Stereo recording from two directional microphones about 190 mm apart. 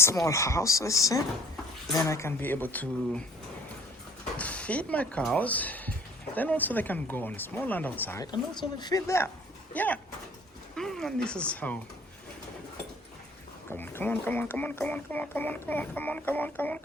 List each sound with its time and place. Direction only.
0.0 s speech: 15° left (ahead or behind)
4.4 s speech: 5° left (ahead or behind)
13.7 s speech: 10° left (ahead or behind)